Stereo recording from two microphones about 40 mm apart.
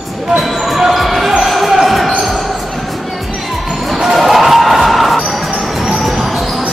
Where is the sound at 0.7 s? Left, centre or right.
Centre.